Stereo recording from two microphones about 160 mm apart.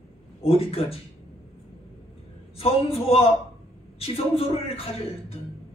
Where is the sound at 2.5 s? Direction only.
35° left (ahead or behind).